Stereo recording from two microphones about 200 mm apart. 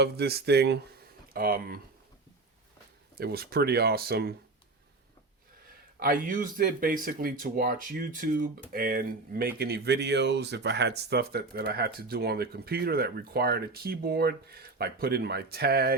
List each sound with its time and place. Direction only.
0.0 s speech: 55° right (ahead or behind)
3.2 s speech: 50° right (ahead or behind)
6.0 s speech: 45° right (ahead or behind)